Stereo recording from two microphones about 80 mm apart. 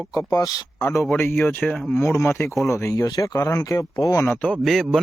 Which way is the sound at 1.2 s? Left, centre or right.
Left.